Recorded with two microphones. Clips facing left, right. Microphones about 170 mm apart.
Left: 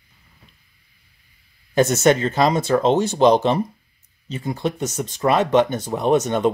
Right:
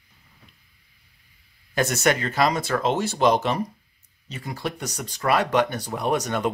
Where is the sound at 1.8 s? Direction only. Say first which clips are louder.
Left 6 dB; 25° left (ahead or behind).